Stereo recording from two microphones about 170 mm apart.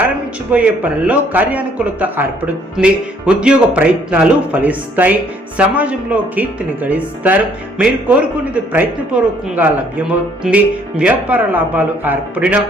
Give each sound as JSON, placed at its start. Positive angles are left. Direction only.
{"t": 0.5, "sound": "a man's voice", "side_deg": -10}